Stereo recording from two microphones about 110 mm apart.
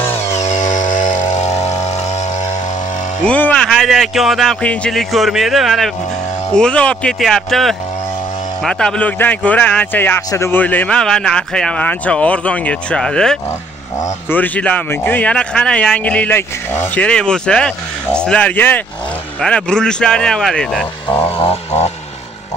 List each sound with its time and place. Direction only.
0.3 s chainsaw: 90° left
1.3 s vehicle: 85° left
3.3 s music: 15° left (ahead or behind)
3.6 s a man's voice: centre (ahead or behind)
4.6 s a man's voice: 10° left (ahead or behind)
21.2 s a sound: 65° left (ahead or behind)